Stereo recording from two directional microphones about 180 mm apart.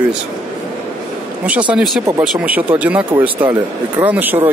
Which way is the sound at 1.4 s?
10° right (ahead or behind).